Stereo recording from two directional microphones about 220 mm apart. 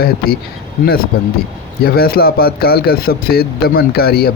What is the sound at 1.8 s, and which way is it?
A man's voice, 45° left (ahead or behind).